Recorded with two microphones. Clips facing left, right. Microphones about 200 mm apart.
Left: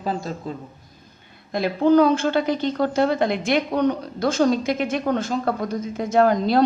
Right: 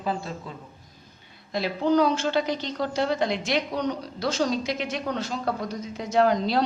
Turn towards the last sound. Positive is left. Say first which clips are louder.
# left 4 dB
turn(degrees=50)  # may be behind; listen again after turning